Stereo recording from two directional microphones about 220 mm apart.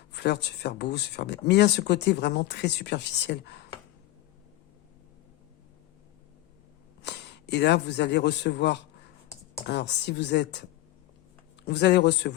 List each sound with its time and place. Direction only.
0.1 s speech: 50° left (ahead or behind)
7.0 s a man's voice: 50° left (ahead or behind)